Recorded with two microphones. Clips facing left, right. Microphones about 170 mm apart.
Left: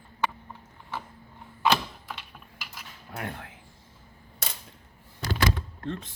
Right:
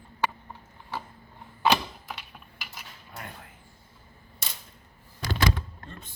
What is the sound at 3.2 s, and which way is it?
Speech, 70° left (ahead or behind).